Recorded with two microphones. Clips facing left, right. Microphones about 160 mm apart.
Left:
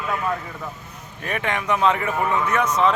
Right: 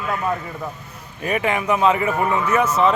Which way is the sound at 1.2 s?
5° right (ahead or behind).